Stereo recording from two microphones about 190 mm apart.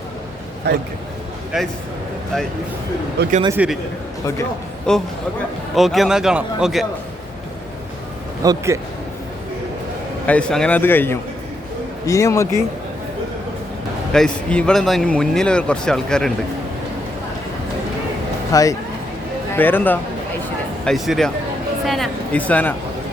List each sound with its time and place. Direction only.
0.7 s a man's voice: 60° right (ahead or behind)
1.5 s a man's voice: 5° right (ahead or behind)
3.2 s a man's voice: 60° right (ahead or behind)
3.6 s speech: 5° right (ahead or behind)
4.9 s a man's voice: 5° left (ahead or behind)
8.4 s speech: 15° right (ahead or behind)
10.2 s a man's voice: 5° left (ahead or behind)
14.1 s a man's voice: 5° left (ahead or behind)
18.5 s a man's voice: 15° left (ahead or behind)
20.8 s a man's voice: centre (ahead or behind)
21.8 s music: centre (ahead or behind)